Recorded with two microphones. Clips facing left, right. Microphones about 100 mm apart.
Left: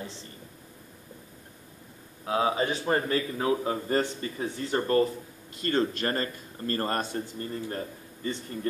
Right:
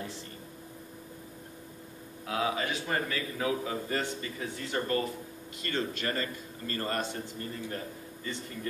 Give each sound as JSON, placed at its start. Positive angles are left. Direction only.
{"t": 2.2, "sound": "a man's voice", "side_deg": 30}